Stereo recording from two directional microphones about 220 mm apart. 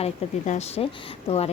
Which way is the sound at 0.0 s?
30° left (ahead or behind).